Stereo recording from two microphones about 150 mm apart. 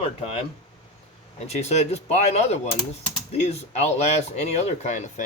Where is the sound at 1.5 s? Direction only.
45° left (ahead or behind).